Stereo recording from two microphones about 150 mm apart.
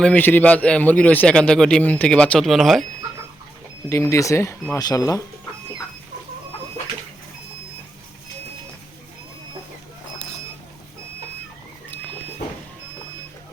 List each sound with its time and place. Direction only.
0.0 s a man's voice: 10° left (ahead or behind)
3.8 s speech: 20° left (ahead or behind)